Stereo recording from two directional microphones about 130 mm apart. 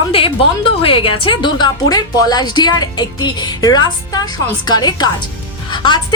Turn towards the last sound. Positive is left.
turn(degrees=35)  # may be behind; listen again after turning